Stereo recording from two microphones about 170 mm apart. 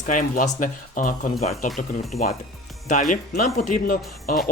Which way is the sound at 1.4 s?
40° left (ahead or behind).